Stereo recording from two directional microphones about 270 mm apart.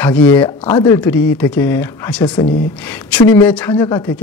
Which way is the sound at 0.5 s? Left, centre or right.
Left.